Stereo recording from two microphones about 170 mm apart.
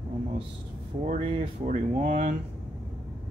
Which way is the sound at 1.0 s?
40° right (ahead or behind).